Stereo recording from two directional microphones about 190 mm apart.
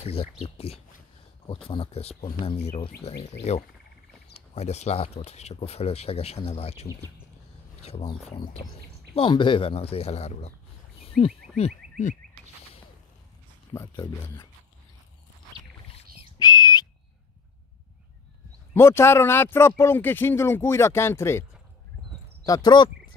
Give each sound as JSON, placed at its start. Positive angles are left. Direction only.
{"t": 0.0, "sound": "speech", "side_deg": 30}
{"t": 9.1, "sound": "speech", "side_deg": 25}
{"t": 11.0, "sound": "frog", "side_deg": 30}
{"t": 13.7, "sound": "speech", "side_deg": 20}
{"t": 15.9, "sound": "whistle", "side_deg": 20}
{"t": 18.7, "sound": "speech", "side_deg": 15}